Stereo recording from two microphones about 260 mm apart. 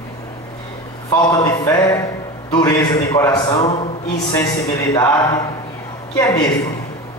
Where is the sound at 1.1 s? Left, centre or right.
Centre.